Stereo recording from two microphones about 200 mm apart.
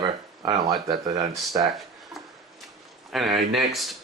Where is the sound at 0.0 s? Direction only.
20° right (ahead or behind).